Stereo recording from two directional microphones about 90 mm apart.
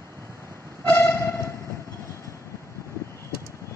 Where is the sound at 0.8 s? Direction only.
25° left (ahead or behind).